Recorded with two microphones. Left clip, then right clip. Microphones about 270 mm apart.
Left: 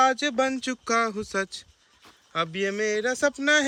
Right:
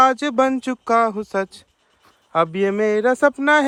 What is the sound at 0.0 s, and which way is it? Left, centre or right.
Speech, centre.